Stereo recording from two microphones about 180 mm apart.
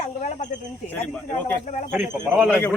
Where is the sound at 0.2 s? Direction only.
40° left (ahead or behind).